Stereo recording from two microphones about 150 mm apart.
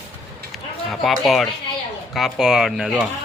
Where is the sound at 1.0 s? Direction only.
Centre (ahead or behind).